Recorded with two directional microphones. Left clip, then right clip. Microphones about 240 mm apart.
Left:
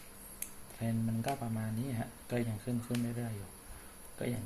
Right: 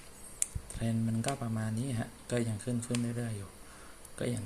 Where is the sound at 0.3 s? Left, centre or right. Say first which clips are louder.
Right 7 dB; centre.